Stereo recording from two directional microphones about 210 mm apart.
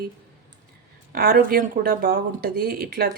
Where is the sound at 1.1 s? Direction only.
45° right (ahead or behind).